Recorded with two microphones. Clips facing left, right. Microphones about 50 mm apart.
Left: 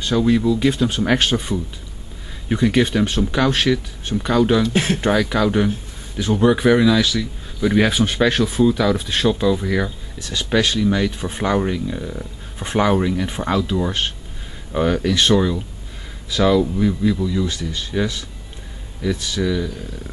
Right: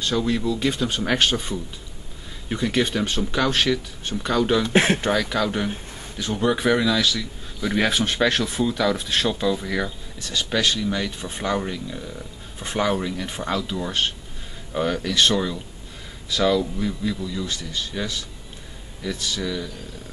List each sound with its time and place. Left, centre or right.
0.0 s speech: centre
4.6 s speech: right
5.0 s speech: centre